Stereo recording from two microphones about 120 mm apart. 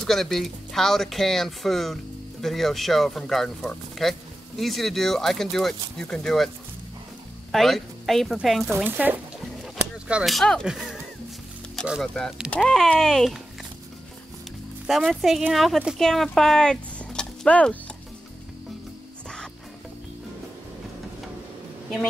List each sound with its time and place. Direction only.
0.0 s speech: centre (ahead or behind)
7.5 s speech: centre (ahead or behind)
8.7 s speech: 15° right (ahead or behind)
10.0 s speech: 5° right (ahead or behind)
11.8 s music: 5° left (ahead or behind)
12.1 s speech: 5° left (ahead or behind)
14.9 s speech: centre (ahead or behind)